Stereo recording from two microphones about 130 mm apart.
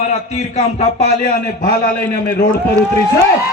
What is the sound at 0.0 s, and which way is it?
A man's voice, 60° left (ahead or behind).